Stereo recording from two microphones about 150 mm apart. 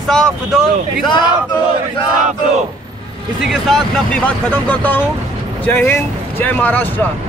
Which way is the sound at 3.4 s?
Centre (ahead or behind).